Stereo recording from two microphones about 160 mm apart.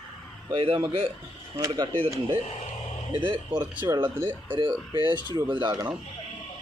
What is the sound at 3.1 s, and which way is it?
Speech, 30° right (ahead or behind).